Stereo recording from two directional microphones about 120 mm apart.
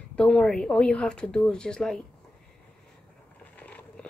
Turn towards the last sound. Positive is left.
turn(degrees=15)  # may be behind; listen again after turning